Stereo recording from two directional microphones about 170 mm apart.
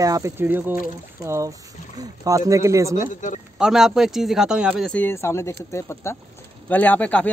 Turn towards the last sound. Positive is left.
turn(degrees=10)  # may be behind; listen again after turning